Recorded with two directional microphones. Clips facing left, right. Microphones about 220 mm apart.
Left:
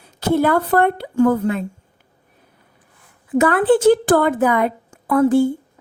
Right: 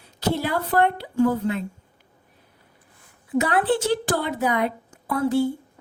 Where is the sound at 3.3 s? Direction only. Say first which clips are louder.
Left 7 dB; 50° left (ahead or behind).